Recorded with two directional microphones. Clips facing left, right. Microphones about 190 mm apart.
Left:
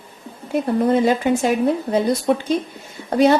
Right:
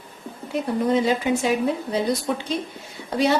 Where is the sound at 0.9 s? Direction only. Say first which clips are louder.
Left 3 dB; 50° left (ahead or behind).